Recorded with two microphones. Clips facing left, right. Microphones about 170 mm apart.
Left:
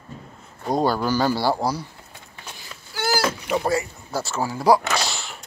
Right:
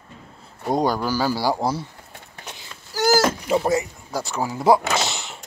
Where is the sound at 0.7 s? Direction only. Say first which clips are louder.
Left 1 dB; 15° right (ahead or behind).